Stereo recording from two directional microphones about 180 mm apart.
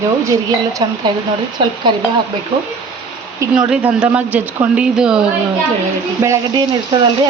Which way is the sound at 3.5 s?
5° right (ahead or behind).